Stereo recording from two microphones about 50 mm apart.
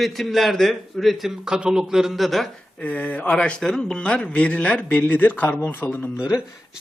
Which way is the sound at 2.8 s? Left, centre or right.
Left.